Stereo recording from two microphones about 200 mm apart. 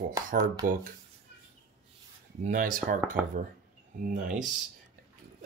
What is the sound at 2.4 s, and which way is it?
Speech, 40° right (ahead or behind).